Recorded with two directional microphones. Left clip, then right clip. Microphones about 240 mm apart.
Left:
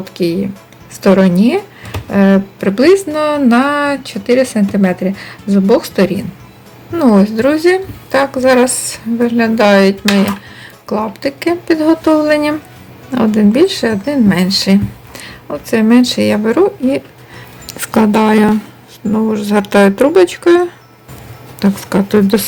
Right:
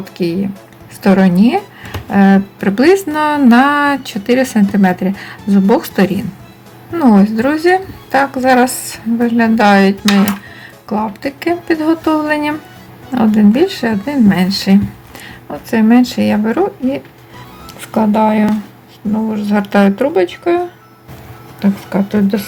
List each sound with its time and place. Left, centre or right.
0.0 s speech: centre
17.7 s speech: left
21.6 s speech: left